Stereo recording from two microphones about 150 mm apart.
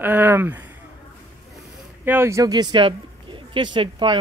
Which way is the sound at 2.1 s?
15° right (ahead or behind).